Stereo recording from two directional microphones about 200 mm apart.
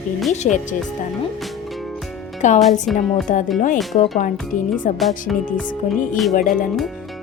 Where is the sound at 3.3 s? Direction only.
40° left (ahead or behind).